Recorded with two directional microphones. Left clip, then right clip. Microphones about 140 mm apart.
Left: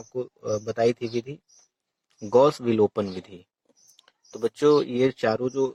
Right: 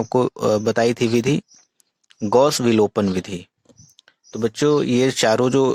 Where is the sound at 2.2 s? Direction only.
40° right (ahead or behind).